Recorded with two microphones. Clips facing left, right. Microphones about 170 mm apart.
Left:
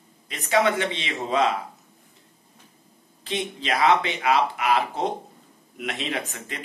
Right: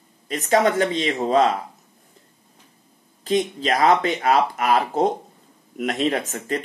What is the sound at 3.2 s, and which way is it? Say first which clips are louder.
Speech: right 7 dB; 45° right (ahead or behind).